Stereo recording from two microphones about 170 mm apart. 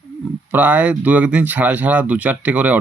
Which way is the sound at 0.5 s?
10° right (ahead or behind).